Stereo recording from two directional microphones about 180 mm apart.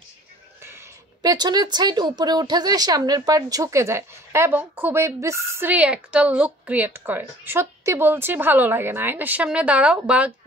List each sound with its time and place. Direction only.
1.2 s speech: 20° right (ahead or behind); by 10.3 s 5° right (ahead or behind)